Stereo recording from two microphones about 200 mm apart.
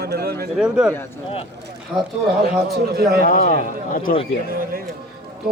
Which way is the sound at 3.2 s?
45° left (ahead or behind).